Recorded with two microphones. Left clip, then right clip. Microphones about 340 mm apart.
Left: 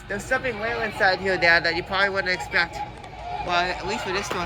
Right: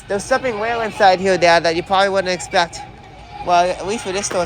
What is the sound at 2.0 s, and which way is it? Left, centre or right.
Speech, right.